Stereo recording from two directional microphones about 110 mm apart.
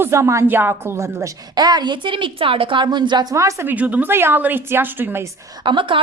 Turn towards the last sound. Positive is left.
turn(degrees=-45)  # may be behind; listen again after turning